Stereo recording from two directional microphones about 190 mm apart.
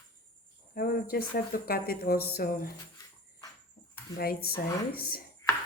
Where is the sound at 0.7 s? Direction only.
50° left (ahead or behind).